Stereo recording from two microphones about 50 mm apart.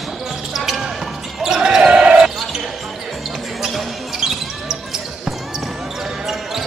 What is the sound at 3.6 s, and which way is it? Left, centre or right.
Basketball bounce, centre.